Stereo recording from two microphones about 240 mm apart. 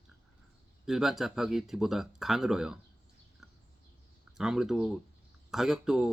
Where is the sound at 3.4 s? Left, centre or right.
Centre.